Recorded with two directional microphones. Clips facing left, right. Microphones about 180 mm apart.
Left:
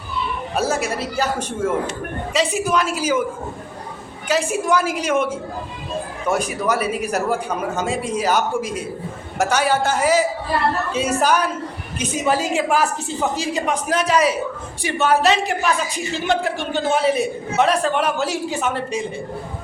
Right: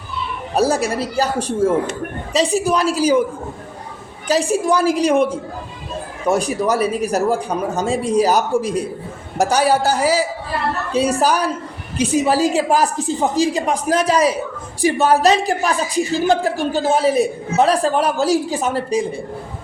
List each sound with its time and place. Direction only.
0.5 s a woman's voice: 35° right (ahead or behind)
4.3 s a woman's voice: 35° right (ahead or behind)